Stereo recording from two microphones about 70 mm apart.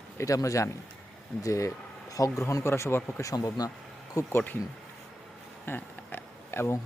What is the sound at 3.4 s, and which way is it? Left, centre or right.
Speech, left.